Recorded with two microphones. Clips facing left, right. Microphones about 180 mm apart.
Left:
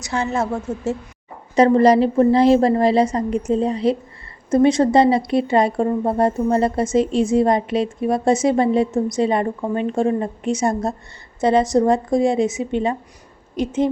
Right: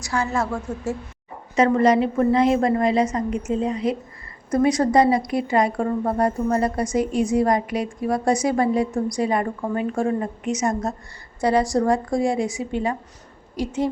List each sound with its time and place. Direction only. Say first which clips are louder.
0.0 s speech: left 2 dB; 20° left (ahead or behind)
1.5 s a woman's voice: left 4 dB; 35° left (ahead or behind)